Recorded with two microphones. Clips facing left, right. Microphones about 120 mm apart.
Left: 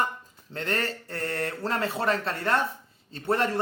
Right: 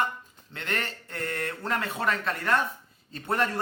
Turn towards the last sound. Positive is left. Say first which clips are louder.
# left 2 dB
turn(degrees=30)  # may be behind; listen again after turning